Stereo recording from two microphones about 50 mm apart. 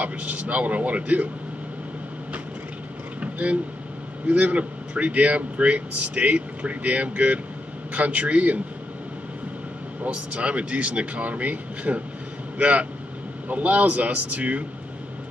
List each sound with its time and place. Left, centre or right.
0.0 s speech: right
3.2 s vehicle: right
4.3 s speech: right
10.0 s speech: right